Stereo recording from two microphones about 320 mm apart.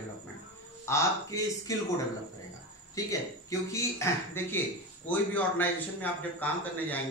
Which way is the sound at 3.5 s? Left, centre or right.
Centre.